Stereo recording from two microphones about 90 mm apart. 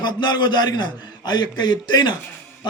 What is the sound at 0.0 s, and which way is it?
A man's voice, 55° left (ahead or behind).